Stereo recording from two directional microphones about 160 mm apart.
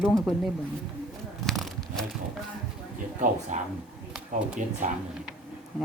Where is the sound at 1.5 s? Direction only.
Centre (ahead or behind).